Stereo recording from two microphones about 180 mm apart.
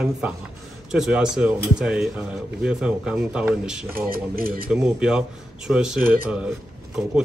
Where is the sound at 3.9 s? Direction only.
55° right (ahead or behind).